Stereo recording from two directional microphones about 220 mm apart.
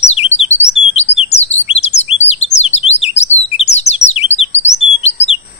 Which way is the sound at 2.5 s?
30° left (ahead or behind).